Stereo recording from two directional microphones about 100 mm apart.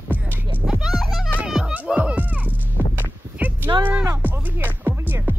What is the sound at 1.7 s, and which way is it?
Music, 15° right (ahead or behind).